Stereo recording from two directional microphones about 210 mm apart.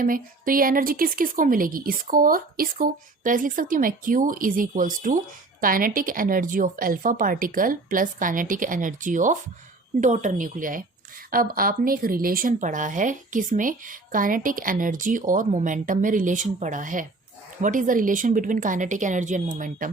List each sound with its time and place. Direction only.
0.0 s a woman's voice: 40° right (ahead or behind)